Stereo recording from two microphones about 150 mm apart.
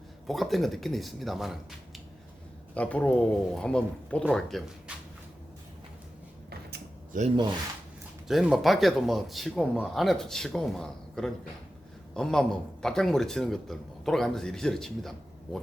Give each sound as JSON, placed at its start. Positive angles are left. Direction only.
{"t": 0.3, "sound": "a man's voice", "side_deg": 0}
{"t": 4.9, "sound": "cupboard open or close", "side_deg": -5}
{"t": 6.7, "sound": "a sound", "side_deg": -90}
{"t": 8.3, "sound": "a man's voice", "side_deg": 0}